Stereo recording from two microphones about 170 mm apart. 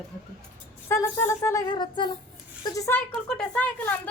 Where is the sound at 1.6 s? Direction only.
25° left (ahead or behind).